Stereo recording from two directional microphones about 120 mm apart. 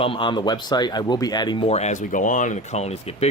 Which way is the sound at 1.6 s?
65° left (ahead or behind).